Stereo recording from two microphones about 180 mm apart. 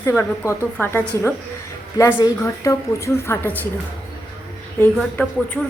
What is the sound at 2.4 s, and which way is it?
A woman's voice, 15° left (ahead or behind).